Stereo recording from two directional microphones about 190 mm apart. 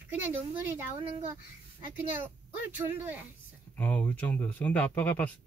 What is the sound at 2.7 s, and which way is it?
Speech, 10° right (ahead or behind).